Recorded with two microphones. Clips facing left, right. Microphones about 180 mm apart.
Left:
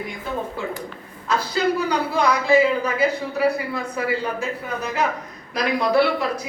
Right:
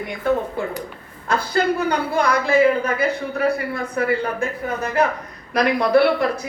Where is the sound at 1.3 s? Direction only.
55° right (ahead or behind).